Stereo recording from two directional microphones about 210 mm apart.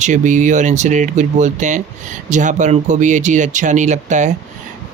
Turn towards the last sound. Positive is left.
turn(degrees=-35)  # may be behind; listen again after turning